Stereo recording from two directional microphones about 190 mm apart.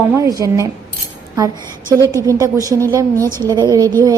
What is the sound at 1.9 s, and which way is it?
A woman's voice, 15° right (ahead or behind).